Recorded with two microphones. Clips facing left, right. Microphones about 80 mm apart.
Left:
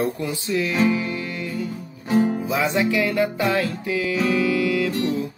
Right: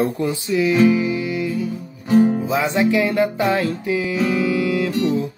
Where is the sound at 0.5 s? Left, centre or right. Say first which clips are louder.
Right 5 dB; centre.